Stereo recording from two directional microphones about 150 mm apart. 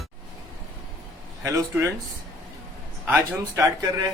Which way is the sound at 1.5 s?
20° right (ahead or behind).